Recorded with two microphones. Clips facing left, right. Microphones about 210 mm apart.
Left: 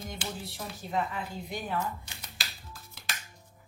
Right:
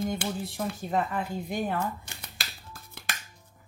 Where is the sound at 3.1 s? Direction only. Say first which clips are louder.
Right 2 dB; 55° right (ahead or behind).